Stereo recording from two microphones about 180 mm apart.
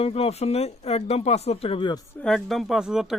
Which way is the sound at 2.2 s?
Centre (ahead or behind).